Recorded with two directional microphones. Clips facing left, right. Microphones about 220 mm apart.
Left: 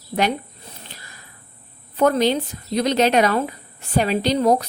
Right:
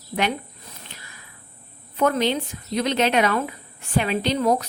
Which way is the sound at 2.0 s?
35° left (ahead or behind).